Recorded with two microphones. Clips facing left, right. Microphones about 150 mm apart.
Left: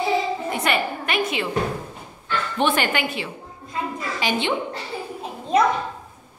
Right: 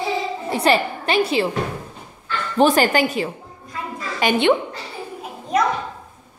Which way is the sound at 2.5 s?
40° right (ahead or behind).